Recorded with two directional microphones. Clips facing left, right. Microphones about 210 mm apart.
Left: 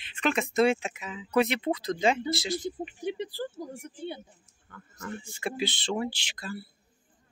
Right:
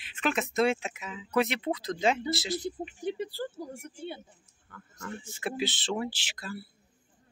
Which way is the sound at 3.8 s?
20° left (ahead or behind).